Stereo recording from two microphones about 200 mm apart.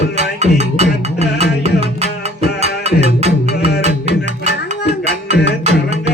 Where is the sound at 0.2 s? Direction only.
35° right (ahead or behind).